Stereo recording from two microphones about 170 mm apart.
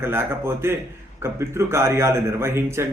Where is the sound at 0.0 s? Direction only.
15° right (ahead or behind).